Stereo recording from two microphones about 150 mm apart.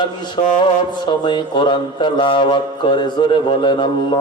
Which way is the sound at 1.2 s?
30° left (ahead or behind).